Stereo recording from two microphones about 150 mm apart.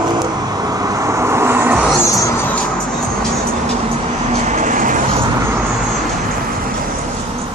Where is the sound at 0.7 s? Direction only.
25° right (ahead or behind).